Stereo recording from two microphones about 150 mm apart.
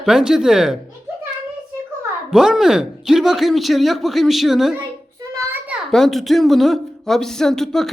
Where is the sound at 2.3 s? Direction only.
5° right (ahead or behind).